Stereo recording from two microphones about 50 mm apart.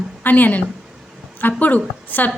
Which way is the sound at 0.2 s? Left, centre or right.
Left.